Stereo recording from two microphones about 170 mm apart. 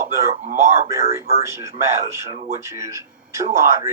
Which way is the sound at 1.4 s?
15° right (ahead or behind).